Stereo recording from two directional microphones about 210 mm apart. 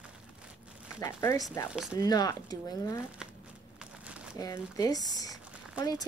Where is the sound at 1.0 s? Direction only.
15° left (ahead or behind).